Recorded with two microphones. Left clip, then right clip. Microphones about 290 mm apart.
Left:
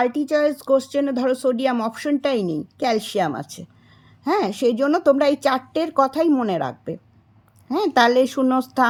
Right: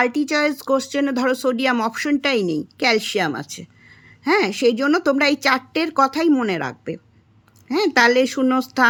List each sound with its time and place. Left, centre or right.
0.2 s speech: centre